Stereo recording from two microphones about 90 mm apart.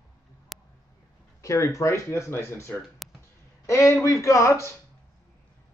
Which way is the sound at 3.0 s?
Centre (ahead or behind).